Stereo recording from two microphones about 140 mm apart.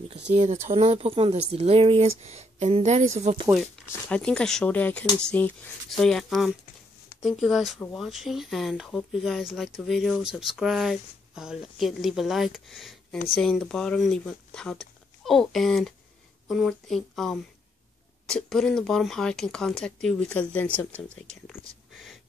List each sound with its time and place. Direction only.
0.3 s speech: 55° right (ahead or behind)
4.1 s speech: 5° left (ahead or behind)